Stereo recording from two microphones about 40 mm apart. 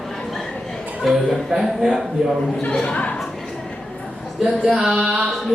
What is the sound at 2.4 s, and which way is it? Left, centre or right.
Speech, centre.